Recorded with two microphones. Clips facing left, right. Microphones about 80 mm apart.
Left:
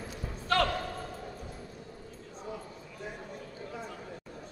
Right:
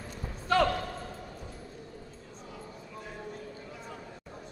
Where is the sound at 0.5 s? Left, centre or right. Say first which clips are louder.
Right 3 dB; centre.